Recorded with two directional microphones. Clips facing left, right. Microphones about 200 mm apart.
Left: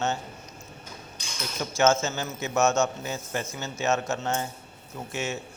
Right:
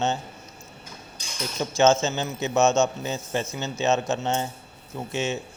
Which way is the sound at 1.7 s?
20° right (ahead or behind).